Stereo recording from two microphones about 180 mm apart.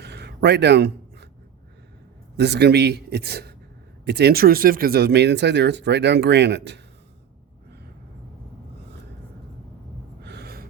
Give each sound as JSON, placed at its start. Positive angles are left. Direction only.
{"t": 0.0, "sound": "a sound", "side_deg": -70}
{"t": 2.3, "sound": "a man's voice", "side_deg": -70}
{"t": 10.2, "sound": "gasp", "side_deg": -65}